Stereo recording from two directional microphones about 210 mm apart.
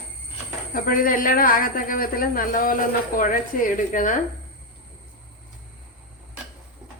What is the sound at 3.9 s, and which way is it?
Speech, 40° left (ahead or behind).